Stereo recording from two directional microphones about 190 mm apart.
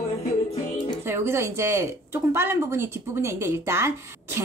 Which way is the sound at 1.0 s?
15° right (ahead or behind).